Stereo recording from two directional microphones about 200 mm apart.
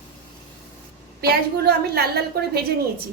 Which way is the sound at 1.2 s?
50° right (ahead or behind).